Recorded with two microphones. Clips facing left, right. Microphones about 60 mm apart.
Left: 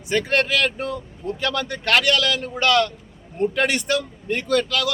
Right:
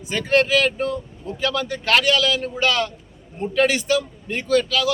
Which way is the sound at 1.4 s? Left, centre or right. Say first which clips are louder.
Right 2 dB; left.